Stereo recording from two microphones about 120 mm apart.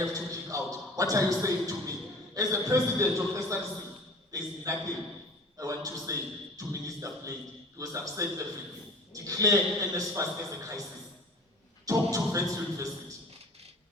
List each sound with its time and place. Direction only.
0.0 s a sound: 25° right (ahead or behind)
2.3 s a man's voice: 30° right (ahead or behind)
11.9 s a man's voice: 25° right (ahead or behind)